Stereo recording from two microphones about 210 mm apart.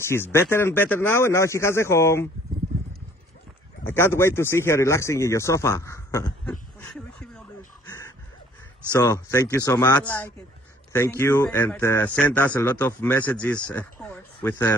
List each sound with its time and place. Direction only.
0.0 s speech: 10° left (ahead or behind)
3.8 s speech: 10° left (ahead or behind)
6.5 s a sound: 5° left (ahead or behind)
7.8 s dog: 20° left (ahead or behind)
9.0 s speech: 15° left (ahead or behind)